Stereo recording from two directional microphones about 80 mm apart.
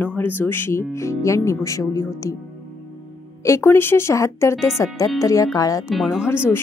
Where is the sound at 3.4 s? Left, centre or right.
Left.